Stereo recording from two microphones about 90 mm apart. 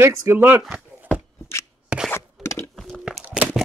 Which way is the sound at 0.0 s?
25° right (ahead or behind).